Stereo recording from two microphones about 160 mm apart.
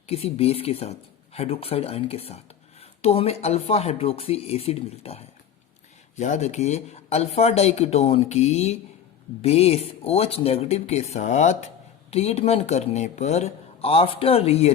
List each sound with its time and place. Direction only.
0.1 s speech: 40° left (ahead or behind)